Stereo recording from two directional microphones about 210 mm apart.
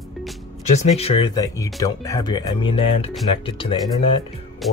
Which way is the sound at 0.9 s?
25° left (ahead or behind).